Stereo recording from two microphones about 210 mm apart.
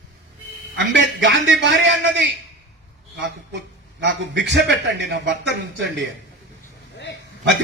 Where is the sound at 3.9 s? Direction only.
60° right (ahead or behind).